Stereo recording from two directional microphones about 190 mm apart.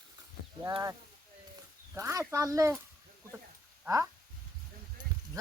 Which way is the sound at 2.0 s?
15° right (ahead or behind).